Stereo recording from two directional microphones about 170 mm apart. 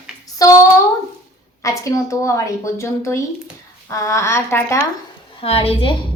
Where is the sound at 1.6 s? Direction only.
20° left (ahead or behind).